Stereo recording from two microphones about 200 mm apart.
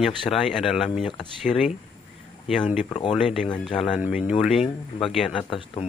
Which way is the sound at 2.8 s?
35° left (ahead or behind).